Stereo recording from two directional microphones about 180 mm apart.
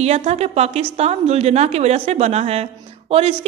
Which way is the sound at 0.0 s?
35° right (ahead or behind).